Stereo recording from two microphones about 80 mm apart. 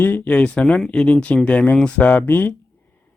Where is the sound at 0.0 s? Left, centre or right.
Left.